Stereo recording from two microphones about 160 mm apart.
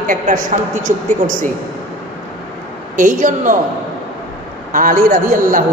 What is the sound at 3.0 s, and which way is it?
Speech, 55° right (ahead or behind).